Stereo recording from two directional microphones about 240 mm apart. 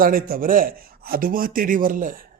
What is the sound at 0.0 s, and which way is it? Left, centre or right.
Speech, right.